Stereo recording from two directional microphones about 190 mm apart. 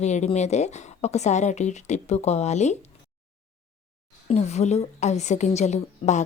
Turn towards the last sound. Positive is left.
turn(degrees=35)  # may be behind; listen again after turning